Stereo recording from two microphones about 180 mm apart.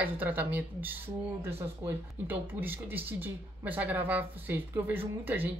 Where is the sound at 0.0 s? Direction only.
10° right (ahead or behind).